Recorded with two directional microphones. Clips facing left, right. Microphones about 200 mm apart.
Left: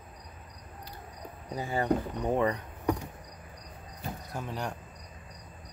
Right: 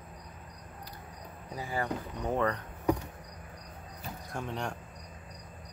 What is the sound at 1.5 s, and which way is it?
Speech, 25° left (ahead or behind).